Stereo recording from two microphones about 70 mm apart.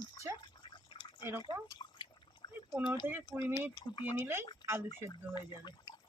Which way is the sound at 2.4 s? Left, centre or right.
Left.